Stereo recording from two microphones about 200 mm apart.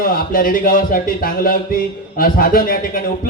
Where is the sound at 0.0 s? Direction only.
45° left (ahead or behind).